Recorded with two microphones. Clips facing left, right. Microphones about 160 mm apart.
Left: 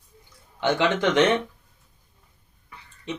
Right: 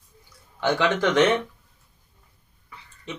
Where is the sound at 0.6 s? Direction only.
20° left (ahead or behind).